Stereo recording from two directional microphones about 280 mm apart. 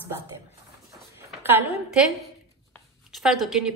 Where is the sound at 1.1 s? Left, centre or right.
Centre.